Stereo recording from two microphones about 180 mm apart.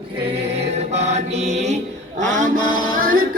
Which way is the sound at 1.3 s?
40° right (ahead or behind).